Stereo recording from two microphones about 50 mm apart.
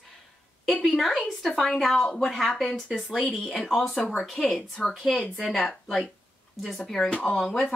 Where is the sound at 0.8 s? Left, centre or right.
Centre.